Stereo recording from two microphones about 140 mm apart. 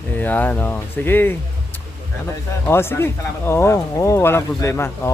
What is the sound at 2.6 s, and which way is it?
Speech, 15° left (ahead or behind).